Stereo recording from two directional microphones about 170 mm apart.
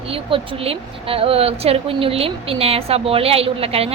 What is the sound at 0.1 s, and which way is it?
A woman's voice, 35° right (ahead or behind).